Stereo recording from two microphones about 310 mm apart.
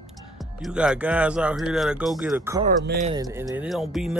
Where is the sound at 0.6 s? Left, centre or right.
Centre.